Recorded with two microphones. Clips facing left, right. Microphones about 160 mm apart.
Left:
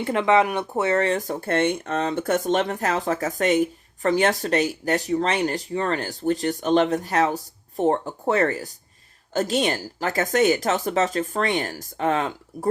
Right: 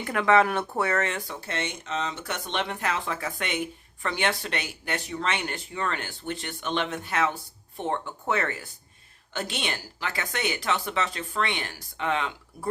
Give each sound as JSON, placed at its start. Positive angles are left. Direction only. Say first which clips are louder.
{"t": 0.0, "sound": "speech", "louder": "left 2 dB", "side_deg": 25}